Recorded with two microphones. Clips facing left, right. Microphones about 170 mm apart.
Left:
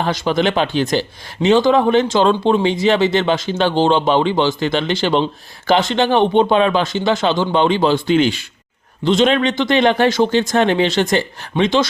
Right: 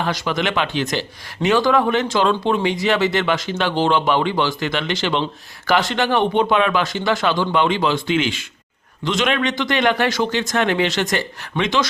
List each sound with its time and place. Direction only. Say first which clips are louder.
0.0 s speech: left 5 dB; 30° left (ahead or behind)